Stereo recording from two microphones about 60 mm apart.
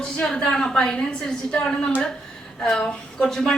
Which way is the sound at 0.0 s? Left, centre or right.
Centre.